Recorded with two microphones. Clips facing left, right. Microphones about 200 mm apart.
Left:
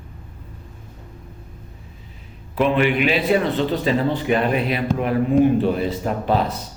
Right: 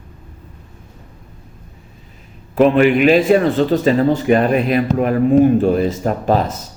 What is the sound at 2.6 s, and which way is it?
A man's voice, 45° right (ahead or behind).